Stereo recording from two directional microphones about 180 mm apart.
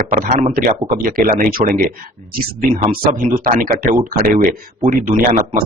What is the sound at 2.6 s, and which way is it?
Speech, 35° right (ahead or behind).